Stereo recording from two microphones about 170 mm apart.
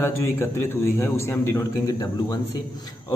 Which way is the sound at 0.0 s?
15° left (ahead or behind).